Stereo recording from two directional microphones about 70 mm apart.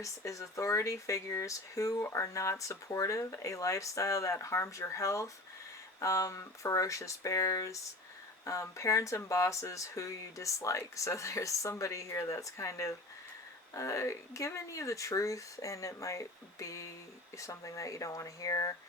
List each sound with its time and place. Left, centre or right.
0.0 s speech: left